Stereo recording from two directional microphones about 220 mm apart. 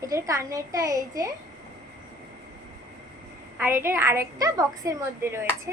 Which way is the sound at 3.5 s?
10° right (ahead or behind).